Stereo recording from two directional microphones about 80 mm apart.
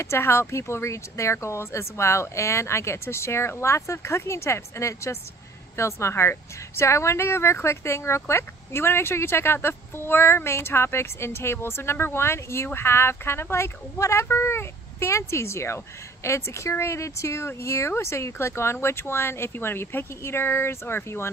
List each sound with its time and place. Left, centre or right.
0.0 s speech: left